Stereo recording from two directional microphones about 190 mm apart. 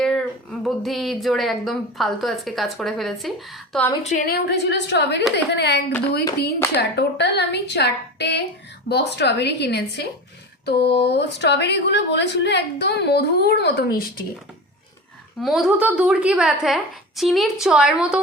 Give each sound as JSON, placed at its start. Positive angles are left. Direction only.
{"t": 0.0, "sound": "speech", "side_deg": 5}
{"t": 4.0, "sound": "a woman's voice", "side_deg": 40}
{"t": 4.3, "sound": "a woman's voice", "side_deg": 60}
{"t": 6.9, "sound": "a woman's voice", "side_deg": 60}
{"t": 15.4, "sound": "a woman's voice", "side_deg": 0}